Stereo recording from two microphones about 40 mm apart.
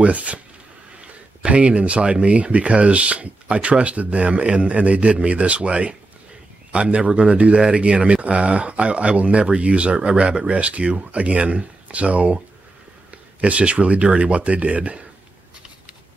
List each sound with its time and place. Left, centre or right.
0.0 s speech: right
13.4 s speech: right